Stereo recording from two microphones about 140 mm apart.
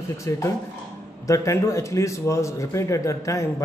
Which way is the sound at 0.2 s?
20° left (ahead or behind).